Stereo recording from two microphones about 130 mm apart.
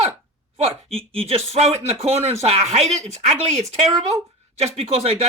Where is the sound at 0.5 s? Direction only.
50° right (ahead or behind).